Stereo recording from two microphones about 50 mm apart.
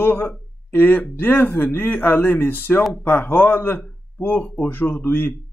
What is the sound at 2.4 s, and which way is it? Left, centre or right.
Speech, left.